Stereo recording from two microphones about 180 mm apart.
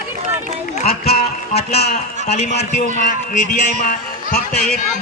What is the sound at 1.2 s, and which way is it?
Music, 35° left (ahead or behind).